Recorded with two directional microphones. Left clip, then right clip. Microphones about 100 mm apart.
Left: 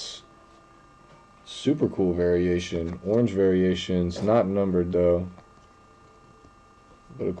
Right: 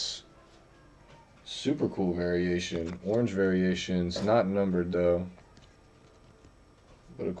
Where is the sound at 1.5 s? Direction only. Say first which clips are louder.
Left 5 dB; 20° left (ahead or behind).